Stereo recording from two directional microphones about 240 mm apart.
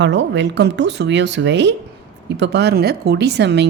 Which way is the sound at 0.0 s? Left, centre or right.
Right.